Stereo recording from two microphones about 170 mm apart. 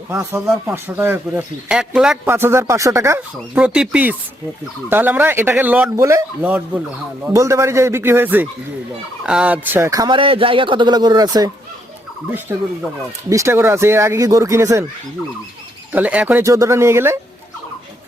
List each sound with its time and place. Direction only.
0.1 s speech: 15° right (ahead or behind)
12.5 s speech: 15° right (ahead or behind)
15.9 s speech: 10° right (ahead or behind)